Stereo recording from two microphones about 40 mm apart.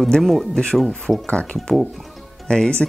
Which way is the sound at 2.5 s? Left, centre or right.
Left.